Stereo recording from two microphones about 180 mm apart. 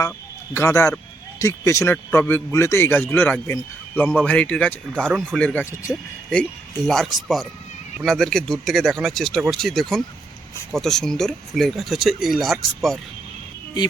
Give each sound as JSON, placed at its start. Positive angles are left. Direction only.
{"t": 0.5, "sound": "speech", "side_deg": 15}